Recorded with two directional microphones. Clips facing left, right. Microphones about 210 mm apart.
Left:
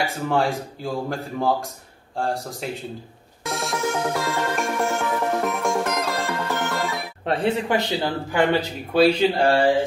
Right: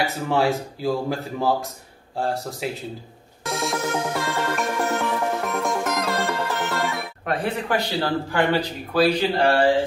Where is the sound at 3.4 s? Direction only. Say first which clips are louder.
Right 2 dB; centre (ahead or behind).